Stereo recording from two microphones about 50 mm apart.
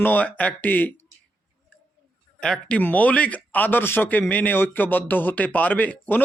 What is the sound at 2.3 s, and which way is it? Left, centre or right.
Speech, left.